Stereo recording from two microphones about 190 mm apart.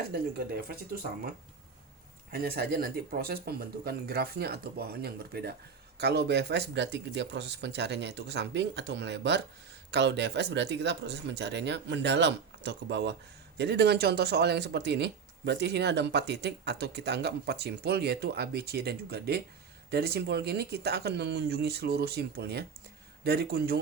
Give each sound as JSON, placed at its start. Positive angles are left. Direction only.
{"t": 0.1, "sound": "speech", "side_deg": -55}
{"t": 2.3, "sound": "speech", "side_deg": -55}